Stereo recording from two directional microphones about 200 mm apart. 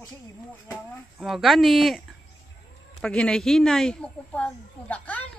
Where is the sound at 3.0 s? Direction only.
5° left (ahead or behind).